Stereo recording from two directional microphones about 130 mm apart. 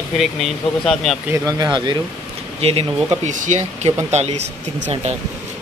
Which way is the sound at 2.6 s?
45° right (ahead or behind).